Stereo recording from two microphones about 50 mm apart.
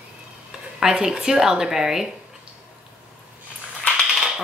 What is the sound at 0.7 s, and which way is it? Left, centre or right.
Speech, centre.